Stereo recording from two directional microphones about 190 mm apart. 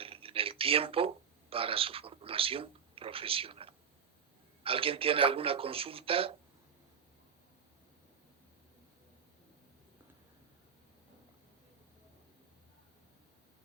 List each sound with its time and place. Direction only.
0.0 s a man's voice: 30° right (ahead or behind)